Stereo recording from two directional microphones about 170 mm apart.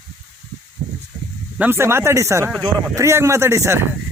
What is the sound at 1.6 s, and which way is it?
Speech, 15° right (ahead or behind).